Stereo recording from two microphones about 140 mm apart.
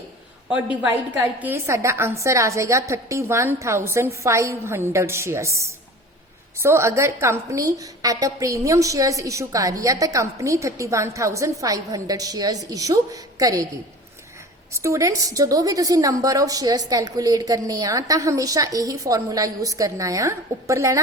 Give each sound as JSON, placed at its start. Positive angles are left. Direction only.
{"t": 0.5, "sound": "a woman's voice", "side_deg": -10}
{"t": 14.7, "sound": "a woman's voice", "side_deg": -20}